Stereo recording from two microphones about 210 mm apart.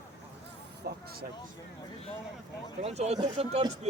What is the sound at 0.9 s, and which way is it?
Vehicle, 50° right (ahead or behind).